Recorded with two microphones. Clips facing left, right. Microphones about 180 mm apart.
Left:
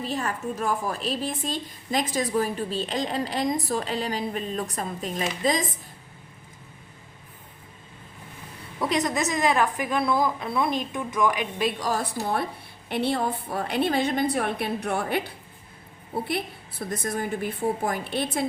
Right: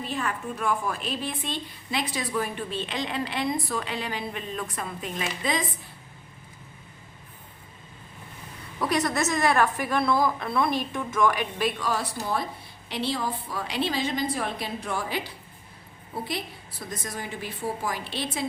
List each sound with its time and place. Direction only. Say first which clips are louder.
0.0 s a woman's voice: left 2 dB; 40° left (ahead or behind)
8.8 s a woman's voice: even; 20° left (ahead or behind)
11.8 s a woman's voice: left 1 dB; 45° left (ahead or behind)
12.9 s a woman's voice: left 4 dB; 55° left (ahead or behind)